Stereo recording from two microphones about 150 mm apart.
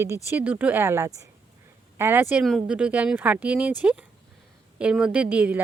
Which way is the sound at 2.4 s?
5° right (ahead or behind).